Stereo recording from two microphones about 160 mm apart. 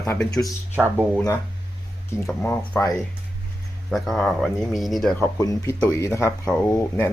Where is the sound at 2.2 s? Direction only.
10° left (ahead or behind).